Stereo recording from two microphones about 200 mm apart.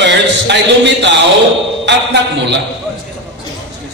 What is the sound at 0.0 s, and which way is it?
A man's voice, 60° right (ahead or behind).